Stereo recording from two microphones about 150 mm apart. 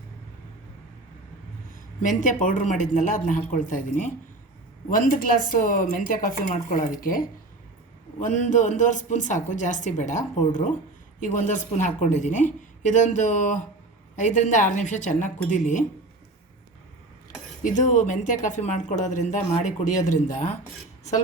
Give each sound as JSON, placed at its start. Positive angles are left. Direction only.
{"t": 2.0, "sound": "speech", "side_deg": 60}
{"t": 8.2, "sound": "speech", "side_deg": 55}
{"t": 17.6, "sound": "speech", "side_deg": 60}